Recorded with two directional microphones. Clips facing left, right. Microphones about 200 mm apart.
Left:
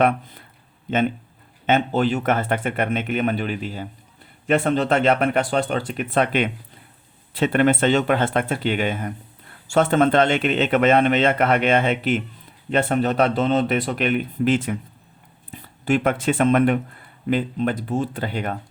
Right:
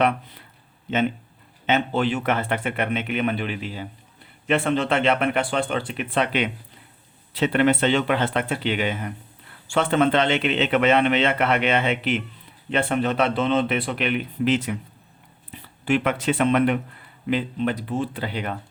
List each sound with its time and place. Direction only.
0.0 s speech: 50° left (ahead or behind)
1.6 s speech: 45° left (ahead or behind)
15.8 s speech: 45° left (ahead or behind)